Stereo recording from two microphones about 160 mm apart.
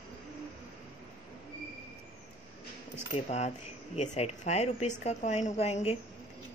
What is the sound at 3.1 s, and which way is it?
A woman's voice, 45° left (ahead or behind).